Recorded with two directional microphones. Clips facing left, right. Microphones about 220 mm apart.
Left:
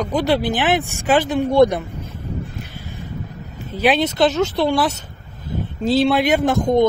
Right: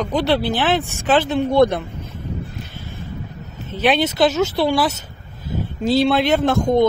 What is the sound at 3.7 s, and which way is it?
Speech, 5° left (ahead or behind).